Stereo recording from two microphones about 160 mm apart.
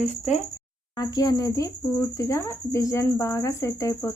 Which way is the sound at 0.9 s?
25° left (ahead or behind).